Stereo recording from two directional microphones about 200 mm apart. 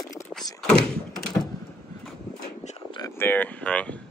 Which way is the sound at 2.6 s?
25° left (ahead or behind).